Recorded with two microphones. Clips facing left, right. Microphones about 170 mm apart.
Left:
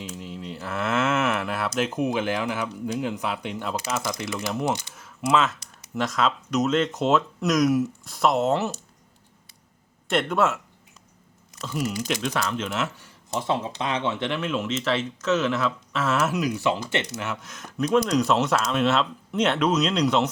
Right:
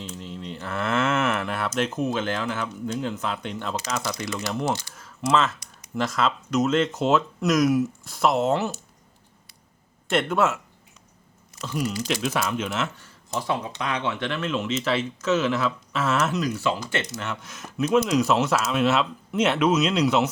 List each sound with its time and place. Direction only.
0.2 s speech: 5° left (ahead or behind)
4.9 s speech: 5° left (ahead or behind)
10.1 s speech: centre (ahead or behind)
11.6 s speech: 5° left (ahead or behind)
13.0 s speech: 20° left (ahead or behind)
17.4 s speech: centre (ahead or behind)